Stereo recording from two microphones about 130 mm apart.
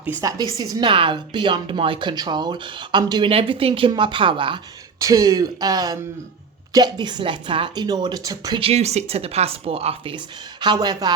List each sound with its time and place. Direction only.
0.2 s a woman's voice: 25° right (ahead or behind)
4.9 s a woman's voice: 25° right (ahead or behind)
8.6 s speech: 55° right (ahead or behind); by 11.1 s 30° right (ahead or behind)